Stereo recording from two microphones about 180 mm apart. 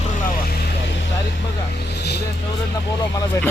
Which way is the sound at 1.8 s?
65° left (ahead or behind).